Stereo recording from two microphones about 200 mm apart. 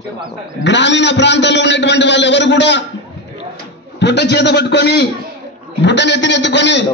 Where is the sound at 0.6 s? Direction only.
60° left (ahead or behind).